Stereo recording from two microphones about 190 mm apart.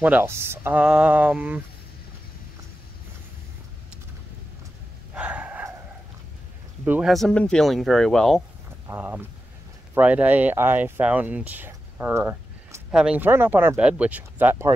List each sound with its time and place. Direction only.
0.0 s speech: 10° right (ahead or behind)
5.1 s a sound: 5° right (ahead or behind)
6.8 s speech: 5° right (ahead or behind)
8.8 s speech: 10° right (ahead or behind)